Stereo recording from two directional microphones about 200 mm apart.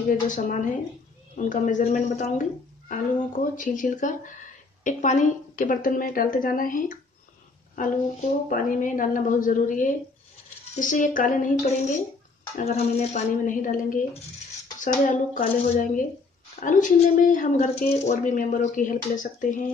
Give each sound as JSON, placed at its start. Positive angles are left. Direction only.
{"t": 0.3, "sound": "a woman's voice", "side_deg": 40}
{"t": 12.7, "sound": "speech", "side_deg": 40}